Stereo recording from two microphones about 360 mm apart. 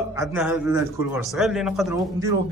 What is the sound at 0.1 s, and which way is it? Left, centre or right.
A man's voice, centre.